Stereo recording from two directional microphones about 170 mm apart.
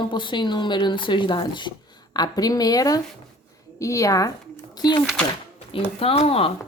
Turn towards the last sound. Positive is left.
turn(degrees=35)  # may be behind; listen again after turning